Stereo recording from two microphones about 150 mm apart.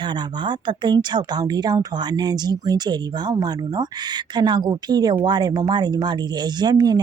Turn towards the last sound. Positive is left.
turn(degrees=-25)  # may be behind; listen again after turning